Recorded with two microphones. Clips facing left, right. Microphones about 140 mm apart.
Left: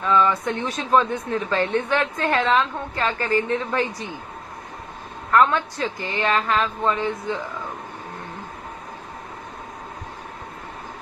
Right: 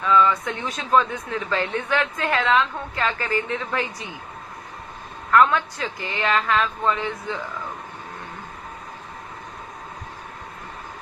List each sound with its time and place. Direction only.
0.1 s speech: 25° left (ahead or behind)
0.4 s a woman's voice: 40° left (ahead or behind)
5.3 s a woman's voice: 30° left (ahead or behind)